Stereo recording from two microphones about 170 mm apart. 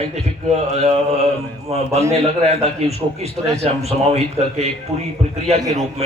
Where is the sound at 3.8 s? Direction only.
40° right (ahead or behind).